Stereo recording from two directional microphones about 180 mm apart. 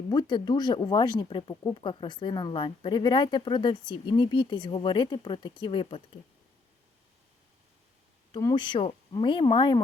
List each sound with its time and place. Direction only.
0.1 s speech: 25° left (ahead or behind)
8.3 s speech: 20° left (ahead or behind)